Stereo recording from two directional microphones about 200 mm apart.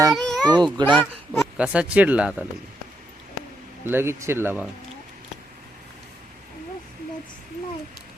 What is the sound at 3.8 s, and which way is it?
Speech, 10° right (ahead or behind).